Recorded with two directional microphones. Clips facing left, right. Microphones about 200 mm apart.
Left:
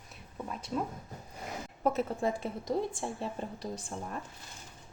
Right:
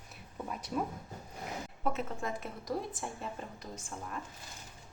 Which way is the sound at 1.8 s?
35° left (ahead or behind).